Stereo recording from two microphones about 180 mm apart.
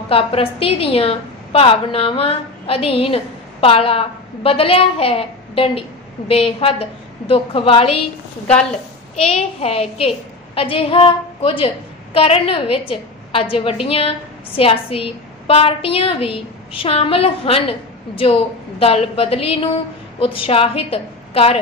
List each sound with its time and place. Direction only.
0.1 s a woman's voice: 30° left (ahead or behind)
9.1 s a woman's voice: 35° left (ahead or behind)